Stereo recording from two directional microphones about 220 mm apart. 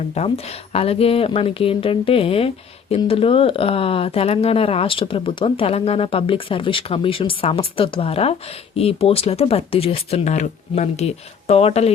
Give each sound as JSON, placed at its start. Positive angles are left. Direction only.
{"t": 0.2, "sound": "speech", "side_deg": 30}